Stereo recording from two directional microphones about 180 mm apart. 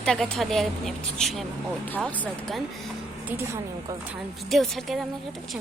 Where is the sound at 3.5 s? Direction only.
15° right (ahead or behind).